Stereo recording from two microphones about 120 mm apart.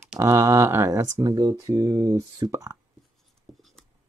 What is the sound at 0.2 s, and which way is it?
Speech, 25° right (ahead or behind).